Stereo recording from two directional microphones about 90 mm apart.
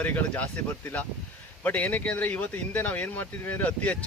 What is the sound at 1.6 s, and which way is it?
Speech, 20° left (ahead or behind).